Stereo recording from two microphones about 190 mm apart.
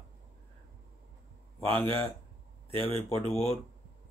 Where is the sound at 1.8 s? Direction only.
30° right (ahead or behind).